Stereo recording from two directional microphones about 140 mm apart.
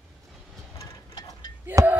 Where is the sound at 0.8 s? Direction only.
25° left (ahead or behind).